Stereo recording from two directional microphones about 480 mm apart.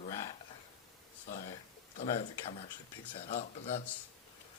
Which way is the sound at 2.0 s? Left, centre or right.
Centre.